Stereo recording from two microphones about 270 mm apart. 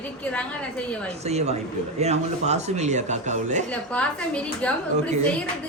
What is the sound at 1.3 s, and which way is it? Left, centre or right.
Speech, right.